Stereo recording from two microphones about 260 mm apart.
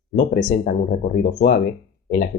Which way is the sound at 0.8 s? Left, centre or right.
Left.